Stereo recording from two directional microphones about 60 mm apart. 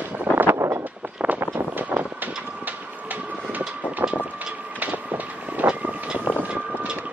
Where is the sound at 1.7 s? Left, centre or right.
Right.